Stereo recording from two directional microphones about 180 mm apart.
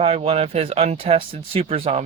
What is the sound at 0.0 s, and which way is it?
Speech, 35° right (ahead or behind).